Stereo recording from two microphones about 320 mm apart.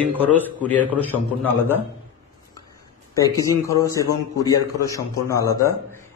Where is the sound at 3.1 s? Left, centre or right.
Centre.